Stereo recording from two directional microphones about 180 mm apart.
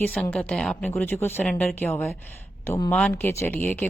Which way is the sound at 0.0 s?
10° left (ahead or behind).